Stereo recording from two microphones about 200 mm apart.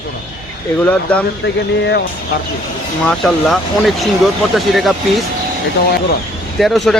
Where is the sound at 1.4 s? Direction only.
60° left (ahead or behind).